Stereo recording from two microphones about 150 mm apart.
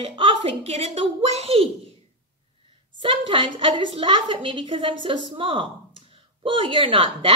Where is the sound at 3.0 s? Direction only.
35° right (ahead or behind).